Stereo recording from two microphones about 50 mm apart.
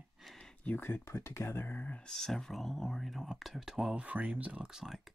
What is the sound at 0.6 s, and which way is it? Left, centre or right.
Speech, left.